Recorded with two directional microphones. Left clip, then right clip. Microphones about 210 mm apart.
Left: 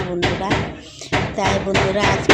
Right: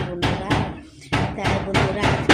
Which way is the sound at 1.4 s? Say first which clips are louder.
Left 7 dB; 20° left (ahead or behind).